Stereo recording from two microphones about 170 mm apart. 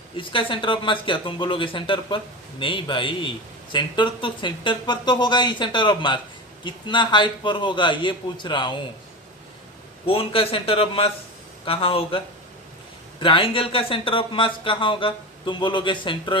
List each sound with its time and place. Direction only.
0.2 s speech: 30° left (ahead or behind)
10.1 s speech: 35° left (ahead or behind)